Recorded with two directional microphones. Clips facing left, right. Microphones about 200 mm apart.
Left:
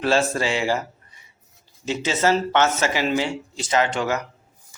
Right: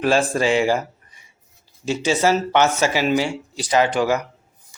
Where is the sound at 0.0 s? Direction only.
15° right (ahead or behind).